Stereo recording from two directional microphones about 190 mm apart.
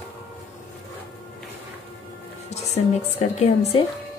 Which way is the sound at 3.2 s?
30° left (ahead or behind).